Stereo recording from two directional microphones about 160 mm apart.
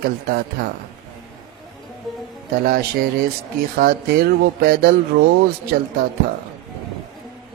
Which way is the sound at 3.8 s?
70° right (ahead or behind).